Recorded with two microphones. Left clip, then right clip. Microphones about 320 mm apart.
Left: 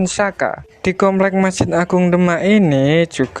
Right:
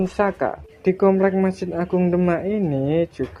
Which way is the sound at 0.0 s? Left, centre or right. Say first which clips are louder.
Left 4 dB; left.